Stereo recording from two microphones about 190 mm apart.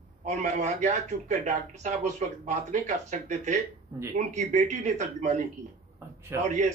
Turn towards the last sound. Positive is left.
turn(degrees=-15)  # may be behind; listen again after turning